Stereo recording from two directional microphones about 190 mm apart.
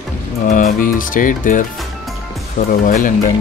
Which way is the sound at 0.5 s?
40° left (ahead or behind).